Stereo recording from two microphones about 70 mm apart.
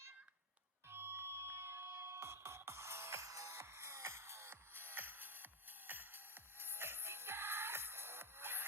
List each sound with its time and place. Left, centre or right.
0.9 s music: right